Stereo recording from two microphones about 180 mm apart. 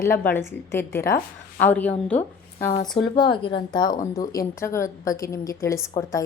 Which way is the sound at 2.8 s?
25° left (ahead or behind).